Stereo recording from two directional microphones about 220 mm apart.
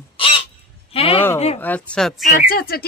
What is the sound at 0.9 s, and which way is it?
Speech, 25° left (ahead or behind).